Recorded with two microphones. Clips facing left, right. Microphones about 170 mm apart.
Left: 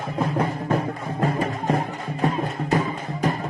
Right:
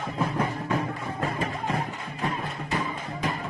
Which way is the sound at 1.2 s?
40° left (ahead or behind).